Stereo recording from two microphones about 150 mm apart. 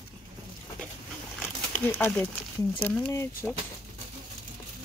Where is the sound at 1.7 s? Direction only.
10° left (ahead or behind).